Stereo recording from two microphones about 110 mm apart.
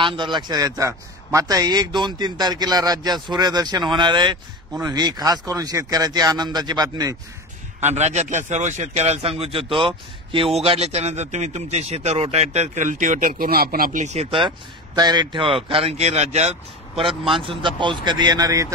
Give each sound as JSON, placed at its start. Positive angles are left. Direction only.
{"t": 0.0, "sound": "a man's voice", "side_deg": -45}
{"t": 7.8, "sound": "a man's voice", "side_deg": -90}
{"t": 14.0, "sound": "a man's voice", "side_deg": -75}
{"t": 15.0, "sound": "speech", "side_deg": -40}
{"t": 17.3, "sound": "a man's voice", "side_deg": -50}